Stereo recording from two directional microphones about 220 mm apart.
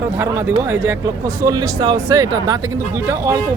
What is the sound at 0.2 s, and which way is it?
Speech, 10° right (ahead or behind).